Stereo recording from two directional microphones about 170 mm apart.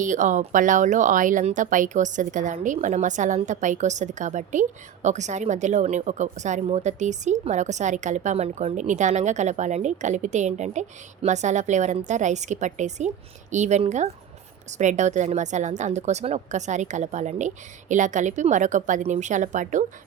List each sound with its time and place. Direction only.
0.0 s speech: 50° right (ahead or behind)